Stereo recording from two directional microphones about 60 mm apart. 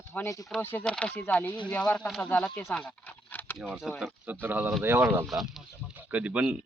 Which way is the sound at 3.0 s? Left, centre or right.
Left.